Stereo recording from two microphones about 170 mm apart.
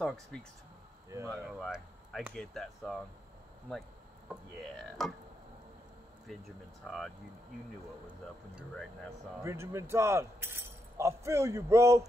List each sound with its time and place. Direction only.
0.0 s speech: 5° left (ahead or behind)
1.1 s speech: 15° right (ahead or behind)
1.5 s speech: centre (ahead or behind)
5.0 s speech: centre (ahead or behind)
6.8 s speech: centre (ahead or behind)
9.4 s speech: 15° right (ahead or behind)